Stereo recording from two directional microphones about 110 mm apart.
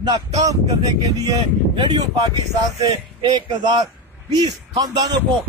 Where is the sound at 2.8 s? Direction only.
40° right (ahead or behind).